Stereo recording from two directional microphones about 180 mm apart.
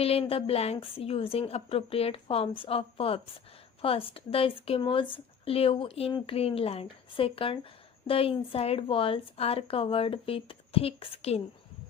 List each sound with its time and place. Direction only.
0.0 s speech: 35° left (ahead or behind)